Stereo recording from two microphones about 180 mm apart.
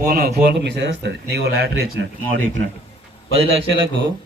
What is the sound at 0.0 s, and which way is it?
Speech, 55° right (ahead or behind).